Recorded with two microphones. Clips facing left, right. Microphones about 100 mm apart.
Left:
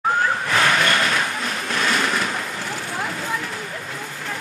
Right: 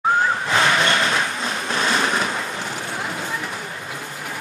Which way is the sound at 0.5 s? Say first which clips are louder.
Even; 20° right (ahead or behind).